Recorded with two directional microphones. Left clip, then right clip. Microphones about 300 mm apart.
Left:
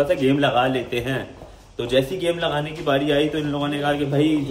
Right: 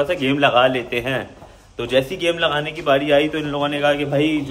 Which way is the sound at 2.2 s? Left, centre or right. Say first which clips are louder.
Right 3 dB; right.